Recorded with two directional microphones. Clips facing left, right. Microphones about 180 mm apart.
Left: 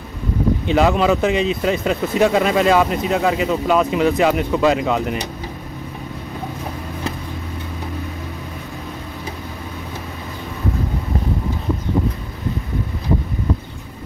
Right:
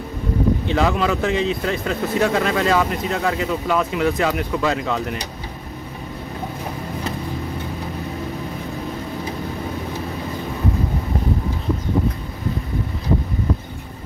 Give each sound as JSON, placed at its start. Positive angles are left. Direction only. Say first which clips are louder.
{"t": 0.7, "sound": "speech", "louder": "left 8 dB", "side_deg": 20}